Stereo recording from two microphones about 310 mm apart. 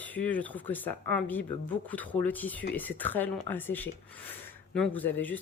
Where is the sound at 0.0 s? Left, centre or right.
Centre.